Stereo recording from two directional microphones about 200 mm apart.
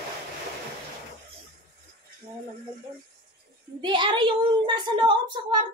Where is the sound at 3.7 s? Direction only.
25° right (ahead or behind).